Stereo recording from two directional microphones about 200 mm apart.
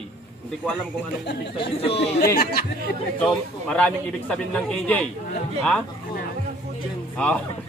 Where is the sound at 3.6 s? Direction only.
5° left (ahead or behind).